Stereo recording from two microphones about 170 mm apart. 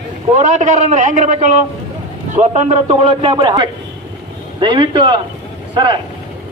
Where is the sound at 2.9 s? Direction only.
30° right (ahead or behind).